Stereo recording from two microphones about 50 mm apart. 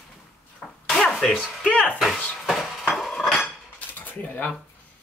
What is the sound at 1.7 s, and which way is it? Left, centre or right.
Music, left.